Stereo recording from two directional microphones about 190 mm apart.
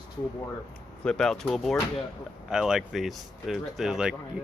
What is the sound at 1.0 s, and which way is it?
Speech, 5° left (ahead or behind).